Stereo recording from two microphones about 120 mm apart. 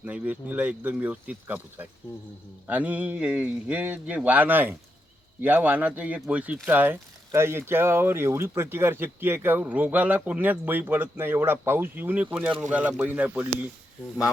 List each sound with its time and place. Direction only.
0.0 s speech: 15° right (ahead or behind)